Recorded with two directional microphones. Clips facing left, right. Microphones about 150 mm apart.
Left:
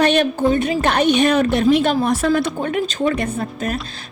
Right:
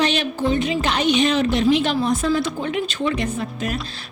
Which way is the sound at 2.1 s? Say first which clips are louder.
Left 3 dB; 65° left (ahead or behind).